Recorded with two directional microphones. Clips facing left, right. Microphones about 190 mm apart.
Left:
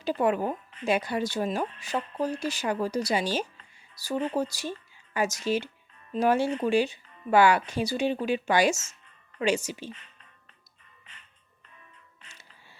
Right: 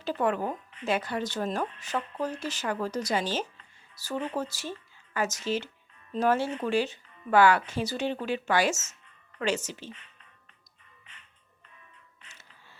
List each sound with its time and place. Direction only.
0.0 s speech: 15° left (ahead or behind)
2.0 s speech: 35° left (ahead or behind)
2.3 s speech: 10° left (ahead or behind)